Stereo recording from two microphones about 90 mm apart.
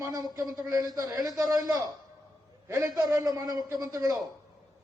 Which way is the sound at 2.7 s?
30° right (ahead or behind).